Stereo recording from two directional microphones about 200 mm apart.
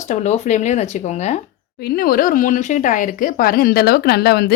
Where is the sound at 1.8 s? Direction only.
50° left (ahead or behind).